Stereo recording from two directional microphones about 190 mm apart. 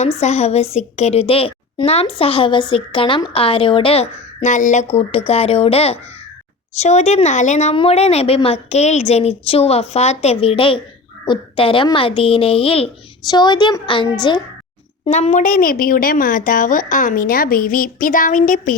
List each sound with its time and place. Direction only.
0.0 s a woman's voice: 35° left (ahead or behind)
15.0 s speech: 35° left (ahead or behind)